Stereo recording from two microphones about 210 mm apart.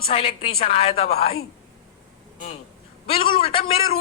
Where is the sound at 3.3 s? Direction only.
25° left (ahead or behind).